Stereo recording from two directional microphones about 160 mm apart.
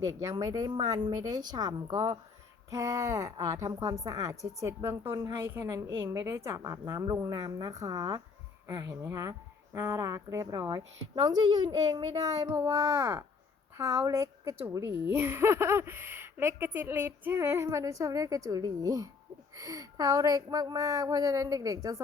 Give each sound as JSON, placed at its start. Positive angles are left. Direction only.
{"t": 0.0, "sound": "a woman's voice", "side_deg": -20}